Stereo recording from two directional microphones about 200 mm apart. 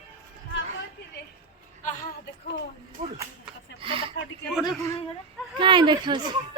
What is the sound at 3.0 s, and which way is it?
Speech, 40° right (ahead or behind).